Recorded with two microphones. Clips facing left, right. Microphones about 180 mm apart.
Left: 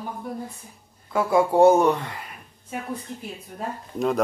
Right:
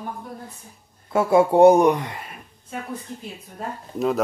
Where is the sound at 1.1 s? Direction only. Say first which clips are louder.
Right 3 dB; 25° right (ahead or behind).